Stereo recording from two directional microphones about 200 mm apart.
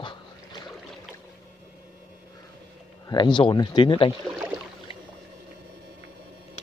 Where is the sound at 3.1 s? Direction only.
20° left (ahead or behind).